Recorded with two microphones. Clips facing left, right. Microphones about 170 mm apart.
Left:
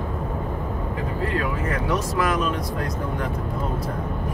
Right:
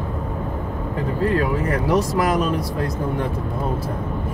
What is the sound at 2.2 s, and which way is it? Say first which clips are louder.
Speech: right 3 dB; 35° right (ahead or behind).